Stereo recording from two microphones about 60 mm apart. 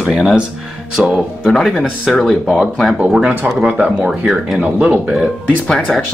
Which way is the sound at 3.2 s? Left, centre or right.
Right.